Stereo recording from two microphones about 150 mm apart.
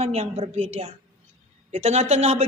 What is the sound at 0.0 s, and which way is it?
A woman's voice, 45° right (ahead or behind).